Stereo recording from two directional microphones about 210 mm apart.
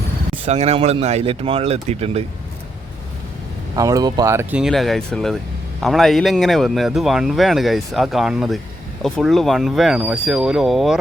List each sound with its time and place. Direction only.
0.4 s speech: 30° right (ahead or behind)
3.8 s speech: 15° right (ahead or behind)